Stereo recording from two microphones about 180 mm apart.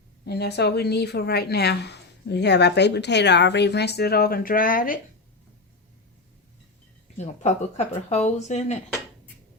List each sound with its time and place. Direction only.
0.3 s speech: 65° left (ahead or behind)
7.2 s speech: 40° left (ahead or behind)